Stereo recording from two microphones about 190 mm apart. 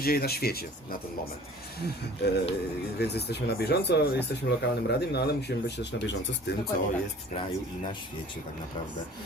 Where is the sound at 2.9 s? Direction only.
60° left (ahead or behind).